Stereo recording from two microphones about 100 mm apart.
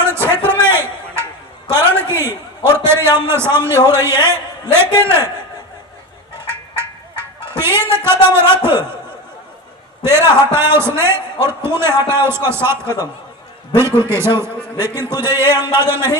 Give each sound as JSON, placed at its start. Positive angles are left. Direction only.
{"t": 0.0, "sound": "a sound", "side_deg": -25}
{"t": 3.6, "sound": "a man's voice", "side_deg": -25}
{"t": 7.5, "sound": "a man's voice", "side_deg": -25}
{"t": 10.0, "sound": "a man's voice", "side_deg": -25}